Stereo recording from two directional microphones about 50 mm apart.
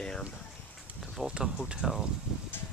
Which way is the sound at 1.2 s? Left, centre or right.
Centre.